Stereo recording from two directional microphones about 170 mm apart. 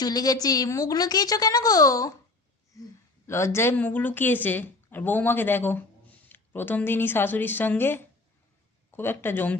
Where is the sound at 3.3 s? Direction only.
15° left (ahead or behind).